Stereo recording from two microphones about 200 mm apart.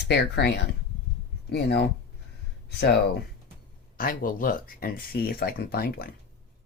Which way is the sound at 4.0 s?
45° left (ahead or behind).